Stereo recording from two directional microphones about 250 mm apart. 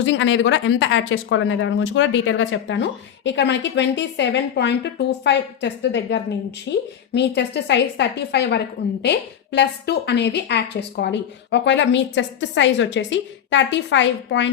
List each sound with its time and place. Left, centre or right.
0.0 s a woman's voice: left